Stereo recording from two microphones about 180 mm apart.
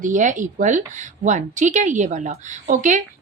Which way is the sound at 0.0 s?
45° right (ahead or behind).